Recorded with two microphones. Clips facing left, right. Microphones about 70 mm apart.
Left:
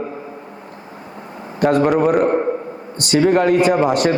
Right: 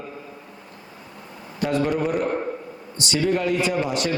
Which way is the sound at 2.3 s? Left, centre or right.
Left.